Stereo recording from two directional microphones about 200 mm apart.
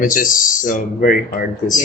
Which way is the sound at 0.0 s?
45° left (ahead or behind).